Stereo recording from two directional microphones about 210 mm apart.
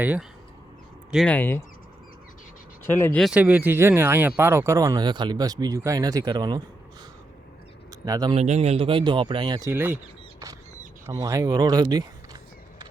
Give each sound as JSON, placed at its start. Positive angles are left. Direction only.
{"t": 0.0, "sound": "speech", "side_deg": -5}
{"t": 1.1, "sound": "speech", "side_deg": 5}
{"t": 2.8, "sound": "speech", "side_deg": 10}
{"t": 8.0, "sound": "speech", "side_deg": -20}
{"t": 8.4, "sound": "speech", "side_deg": -30}
{"t": 11.0, "sound": "speech", "side_deg": -15}